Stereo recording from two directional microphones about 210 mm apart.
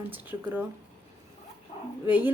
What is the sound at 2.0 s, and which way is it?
Speech, 10° right (ahead or behind).